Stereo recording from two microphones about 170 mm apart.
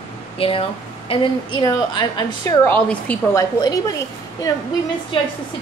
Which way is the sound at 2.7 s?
10° left (ahead or behind).